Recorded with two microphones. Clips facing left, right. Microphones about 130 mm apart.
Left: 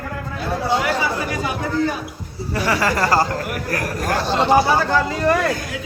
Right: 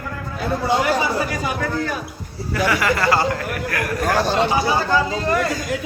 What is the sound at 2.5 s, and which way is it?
Speech, 35° left (ahead or behind).